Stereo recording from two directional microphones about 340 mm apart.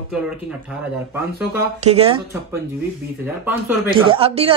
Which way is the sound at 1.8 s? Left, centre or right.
Centre.